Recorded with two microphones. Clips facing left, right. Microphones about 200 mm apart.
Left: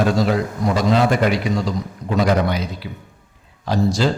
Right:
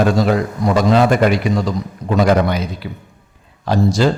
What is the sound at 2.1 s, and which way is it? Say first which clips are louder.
Speech: right 4 dB; 55° right (ahead or behind).